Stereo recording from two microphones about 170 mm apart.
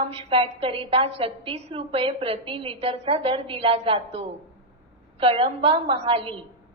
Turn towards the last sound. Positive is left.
turn(degrees=-30)  # may be behind; listen again after turning